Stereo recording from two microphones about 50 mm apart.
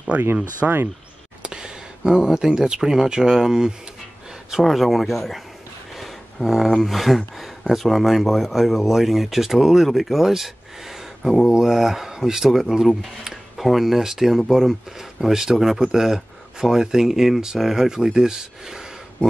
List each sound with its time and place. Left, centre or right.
0.6 s speech: right
1.4 s speech: centre